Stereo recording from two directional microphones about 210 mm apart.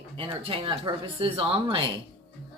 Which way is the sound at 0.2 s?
25° right (ahead or behind).